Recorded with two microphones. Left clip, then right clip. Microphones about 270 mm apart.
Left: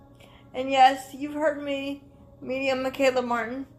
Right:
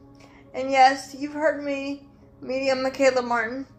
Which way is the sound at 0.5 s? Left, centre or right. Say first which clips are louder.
Right 1 dB; left.